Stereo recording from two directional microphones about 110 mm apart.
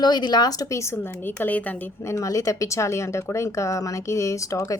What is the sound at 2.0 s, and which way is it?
A woman's voice, 30° left (ahead or behind).